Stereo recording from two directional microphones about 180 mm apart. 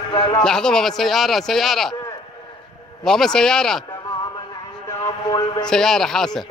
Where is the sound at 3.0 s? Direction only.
Centre (ahead or behind).